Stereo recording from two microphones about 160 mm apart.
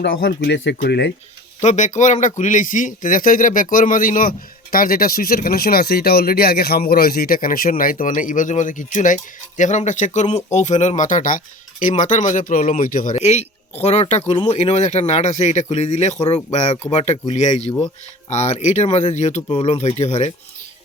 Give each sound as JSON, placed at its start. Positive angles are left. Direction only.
{"t": 0.0, "sound": "speech", "side_deg": 75}
{"t": 1.6, "sound": "speech", "side_deg": 50}